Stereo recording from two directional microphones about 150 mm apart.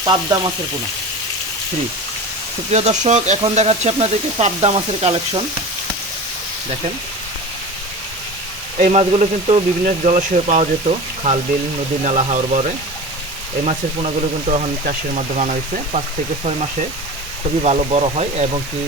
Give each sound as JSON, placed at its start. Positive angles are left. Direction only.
{"t": 0.0, "sound": "frying", "side_deg": -30}
{"t": 2.7, "sound": "speech", "side_deg": -50}
{"t": 8.8, "sound": "speech", "side_deg": -50}
{"t": 12.0, "sound": "speech", "side_deg": -55}
{"t": 14.8, "sound": "speech", "side_deg": -50}
{"t": 17.6, "sound": "speech", "side_deg": -45}